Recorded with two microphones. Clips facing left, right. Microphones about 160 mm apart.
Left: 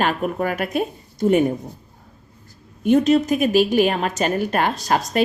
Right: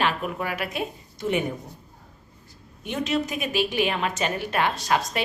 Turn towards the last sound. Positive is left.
turn(degrees=40)  # may be behind; listen again after turning